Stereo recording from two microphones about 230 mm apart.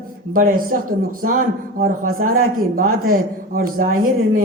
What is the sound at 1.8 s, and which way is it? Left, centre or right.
A man's voice, right.